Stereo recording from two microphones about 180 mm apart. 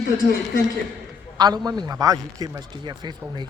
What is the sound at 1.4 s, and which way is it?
A man's voice, 25° right (ahead or behind).